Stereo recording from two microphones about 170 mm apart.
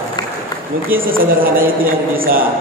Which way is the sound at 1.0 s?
55° right (ahead or behind).